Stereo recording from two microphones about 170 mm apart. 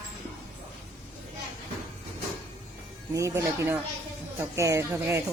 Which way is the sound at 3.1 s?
15° right (ahead or behind).